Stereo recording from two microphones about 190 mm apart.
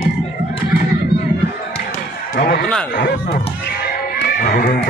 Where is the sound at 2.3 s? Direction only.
55° left (ahead or behind).